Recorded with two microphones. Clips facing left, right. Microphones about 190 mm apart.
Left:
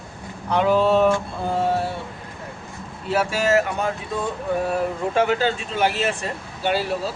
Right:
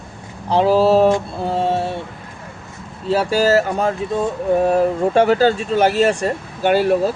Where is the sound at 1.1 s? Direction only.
30° right (ahead or behind).